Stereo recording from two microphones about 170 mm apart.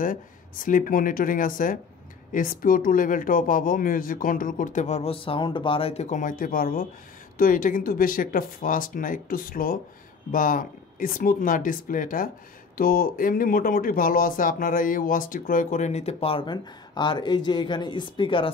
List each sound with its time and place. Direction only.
0.0 s speech: 50° left (ahead or behind); by 18.5 s 30° left (ahead or behind)